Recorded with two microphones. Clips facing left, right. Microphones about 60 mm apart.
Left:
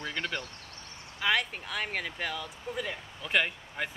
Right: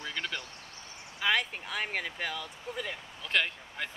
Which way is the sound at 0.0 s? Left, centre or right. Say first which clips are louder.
Left 2 dB; centre.